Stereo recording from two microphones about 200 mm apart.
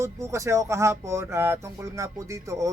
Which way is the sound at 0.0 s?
15° right (ahead or behind).